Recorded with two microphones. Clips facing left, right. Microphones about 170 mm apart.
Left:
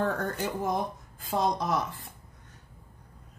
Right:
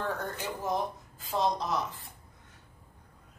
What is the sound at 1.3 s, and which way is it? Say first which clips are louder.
Speech: left 2 dB; 50° left (ahead or behind).